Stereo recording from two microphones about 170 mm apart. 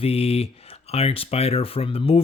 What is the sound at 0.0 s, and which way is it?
Speech, 35° left (ahead or behind).